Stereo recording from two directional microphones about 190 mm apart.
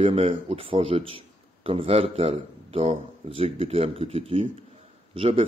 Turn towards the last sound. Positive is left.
turn(degrees=-30)  # may be behind; listen again after turning